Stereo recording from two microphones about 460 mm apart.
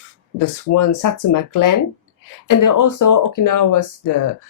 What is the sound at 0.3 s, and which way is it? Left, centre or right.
Speech, left.